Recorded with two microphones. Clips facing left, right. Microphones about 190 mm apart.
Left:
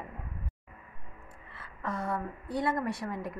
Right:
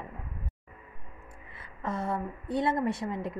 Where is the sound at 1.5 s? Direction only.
20° right (ahead or behind).